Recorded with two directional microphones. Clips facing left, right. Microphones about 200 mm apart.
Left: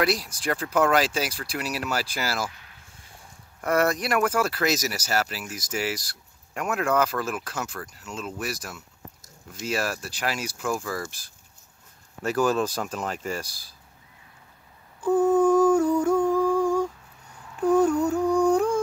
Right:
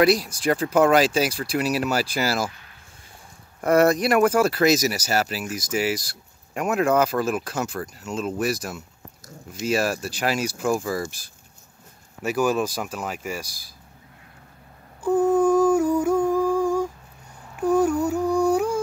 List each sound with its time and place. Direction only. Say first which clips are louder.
0.0 s speech: right 6 dB; 15° right (ahead or behind)
3.6 s speech: right 6 dB; 20° right (ahead or behind)
8.3 s speech: right 8 dB; 40° right (ahead or behind)
8.5 s speech: right 6 dB; 20° right (ahead or behind)
12.2 s speech: right 1 dB; 10° right (ahead or behind)
15.0 s a sound: right 1 dB; 10° right (ahead or behind)